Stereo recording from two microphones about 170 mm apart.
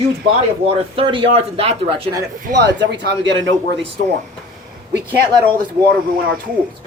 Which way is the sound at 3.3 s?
90° right.